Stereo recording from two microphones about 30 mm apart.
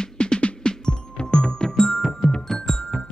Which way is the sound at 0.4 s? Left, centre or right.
Left.